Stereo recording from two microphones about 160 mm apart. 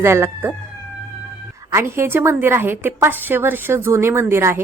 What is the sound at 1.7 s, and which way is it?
Speech, 15° right (ahead or behind).